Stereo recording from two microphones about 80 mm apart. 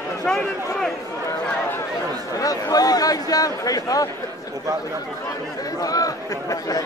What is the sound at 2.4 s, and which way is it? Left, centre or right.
Speech, left.